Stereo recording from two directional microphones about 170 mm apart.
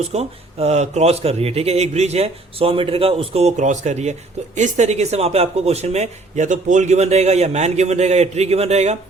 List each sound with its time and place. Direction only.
0.1 s speech: 40° right (ahead or behind)